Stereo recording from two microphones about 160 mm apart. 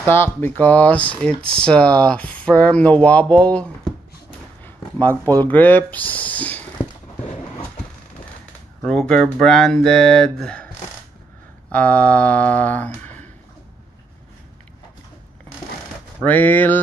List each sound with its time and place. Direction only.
0.0 s speech: 15° left (ahead or behind)
4.6 s a sound: 10° left (ahead or behind)
5.4 s speech: 10° left (ahead or behind)
8.8 s speech: 5° left (ahead or behind)
11.7 s speech: 10° left (ahead or behind)
16.3 s speech: 10° left (ahead or behind)